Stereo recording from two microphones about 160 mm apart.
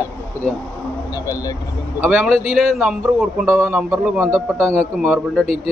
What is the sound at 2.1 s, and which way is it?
A man's voice, centre (ahead or behind).